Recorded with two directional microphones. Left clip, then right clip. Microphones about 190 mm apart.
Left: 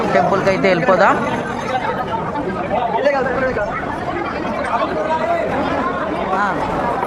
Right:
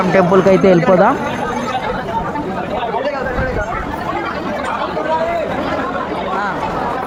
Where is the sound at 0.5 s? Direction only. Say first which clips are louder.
Right 5 dB; 15° right (ahead or behind).